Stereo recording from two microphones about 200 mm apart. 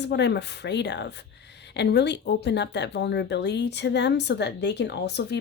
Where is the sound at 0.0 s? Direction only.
60° left (ahead or behind).